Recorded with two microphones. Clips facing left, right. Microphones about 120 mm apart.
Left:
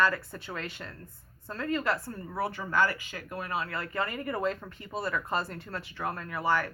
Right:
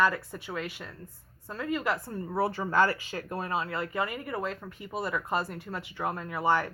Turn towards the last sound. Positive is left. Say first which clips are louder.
# right 2 dB
turn(degrees=-25)  # may be behind; listen again after turning